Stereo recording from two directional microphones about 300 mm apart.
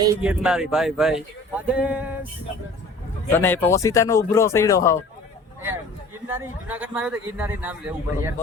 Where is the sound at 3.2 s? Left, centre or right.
Centre.